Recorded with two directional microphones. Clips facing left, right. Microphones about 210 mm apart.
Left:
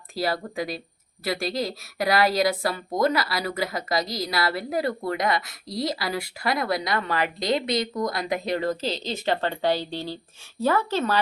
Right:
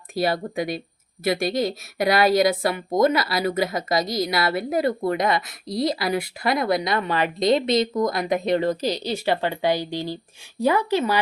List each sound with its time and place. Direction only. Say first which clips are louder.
0.1 s a woman's voice: right 4 dB; 25° right (ahead or behind)